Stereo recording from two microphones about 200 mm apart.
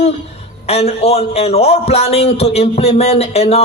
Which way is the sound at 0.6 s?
30° left (ahead or behind).